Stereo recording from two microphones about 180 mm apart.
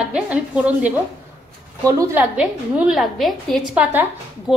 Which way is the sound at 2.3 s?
5° right (ahead or behind).